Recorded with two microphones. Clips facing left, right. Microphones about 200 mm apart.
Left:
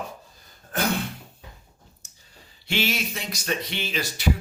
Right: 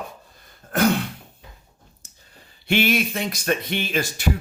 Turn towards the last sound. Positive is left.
turn(degrees=-50)  # may be behind; listen again after turning